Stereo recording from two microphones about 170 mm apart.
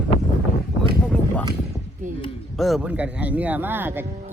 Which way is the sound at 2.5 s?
Centre (ahead or behind).